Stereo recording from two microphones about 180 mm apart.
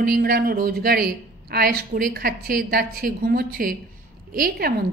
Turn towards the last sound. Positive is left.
turn(degrees=-60)  # may be behind; listen again after turning